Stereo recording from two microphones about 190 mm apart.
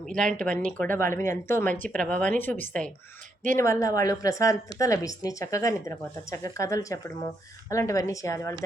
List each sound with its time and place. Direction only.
0.3 s speech: 5° left (ahead or behind)